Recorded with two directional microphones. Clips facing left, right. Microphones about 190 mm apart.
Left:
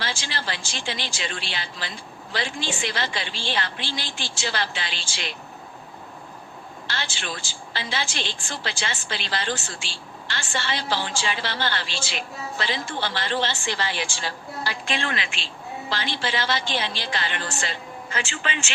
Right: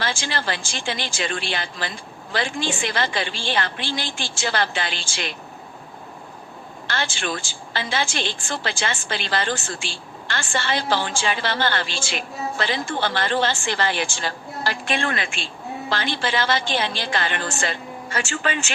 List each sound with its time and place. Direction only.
0.0 s a woman's voice: 50° right (ahead or behind)
6.8 s a woman's voice: 50° right (ahead or behind)